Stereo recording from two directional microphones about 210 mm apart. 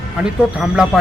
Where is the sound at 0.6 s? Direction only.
Centre (ahead or behind).